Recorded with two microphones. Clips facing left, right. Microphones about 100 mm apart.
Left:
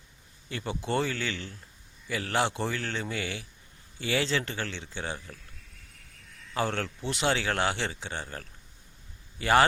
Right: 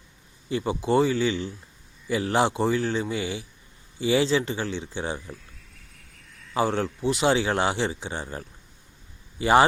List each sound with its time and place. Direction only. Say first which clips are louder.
0.4 s a man's voice: right 8 dB; 15° right (ahead or behind)
6.5 s a man's voice: right 6 dB; 15° right (ahead or behind)